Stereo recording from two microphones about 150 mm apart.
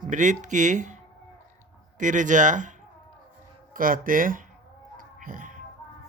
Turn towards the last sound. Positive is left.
turn(degrees=-65)  # may be behind; listen again after turning